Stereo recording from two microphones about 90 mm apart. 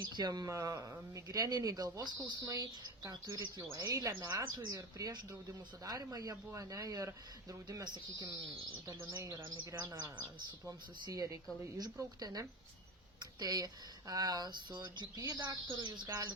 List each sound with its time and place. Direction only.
0.2 s speech: 50° right (ahead or behind)
0.4 s speech: 35° right (ahead or behind)
2.1 s speech: 15° right (ahead or behind)
2.5 s speech: 45° right (ahead or behind)
3.8 s speech: 35° right (ahead or behind)
7.9 s speech: 55° right (ahead or behind)
8.9 s speech: 40° right (ahead or behind)
11.0 s speech: 40° right (ahead or behind); by 15.0 s 55° right (ahead or behind)
15.1 s speech: 40° right (ahead or behind)
15.6 s speech: 60° right (ahead or behind)